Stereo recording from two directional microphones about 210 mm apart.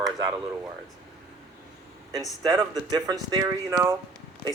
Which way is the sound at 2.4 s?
20° right (ahead or behind).